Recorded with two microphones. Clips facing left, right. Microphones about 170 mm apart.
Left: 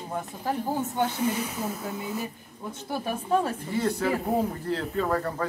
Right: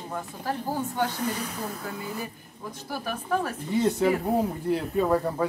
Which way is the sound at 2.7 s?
25° left (ahead or behind).